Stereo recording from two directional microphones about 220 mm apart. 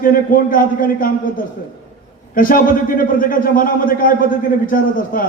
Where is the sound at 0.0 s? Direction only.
40° left (ahead or behind).